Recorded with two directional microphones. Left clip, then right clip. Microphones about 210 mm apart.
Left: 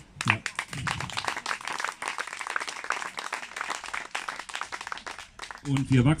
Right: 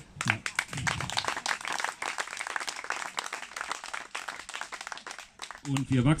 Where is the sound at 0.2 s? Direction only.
35° left (ahead or behind).